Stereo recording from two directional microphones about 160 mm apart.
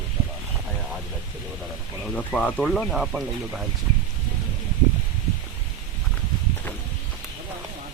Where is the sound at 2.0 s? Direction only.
5° left (ahead or behind).